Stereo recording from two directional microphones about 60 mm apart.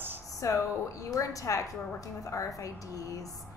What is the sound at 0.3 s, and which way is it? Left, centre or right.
A woman's voice, left.